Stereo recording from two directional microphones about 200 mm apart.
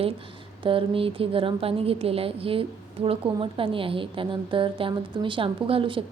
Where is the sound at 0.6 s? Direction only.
25° right (ahead or behind).